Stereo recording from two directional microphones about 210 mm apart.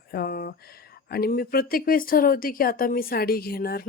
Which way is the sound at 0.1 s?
45° left (ahead or behind).